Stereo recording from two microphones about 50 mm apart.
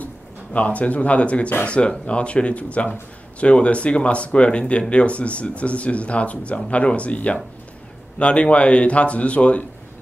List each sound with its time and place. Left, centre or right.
0.0 s speech: left